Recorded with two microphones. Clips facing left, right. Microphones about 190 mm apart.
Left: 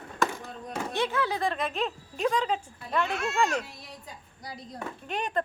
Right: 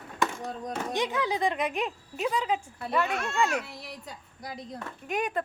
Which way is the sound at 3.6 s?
75° right (ahead or behind).